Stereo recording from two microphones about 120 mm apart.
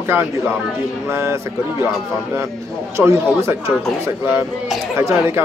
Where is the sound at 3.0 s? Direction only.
25° right (ahead or behind).